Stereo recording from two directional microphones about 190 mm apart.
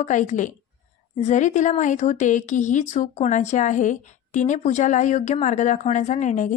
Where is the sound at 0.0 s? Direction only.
40° left (ahead or behind).